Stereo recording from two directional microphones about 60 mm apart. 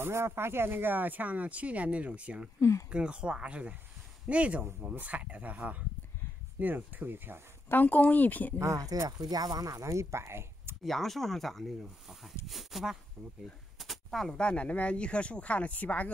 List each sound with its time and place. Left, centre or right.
0.0 s speech: right
7.7 s speech: left
8.5 s speech: right
9.2 s speech: right
10.8 s speech: centre
13.7 s a sound: centre
14.4 s speech: left